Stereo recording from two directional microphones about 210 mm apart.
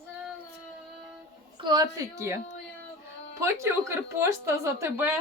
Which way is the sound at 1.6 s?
20° right (ahead or behind).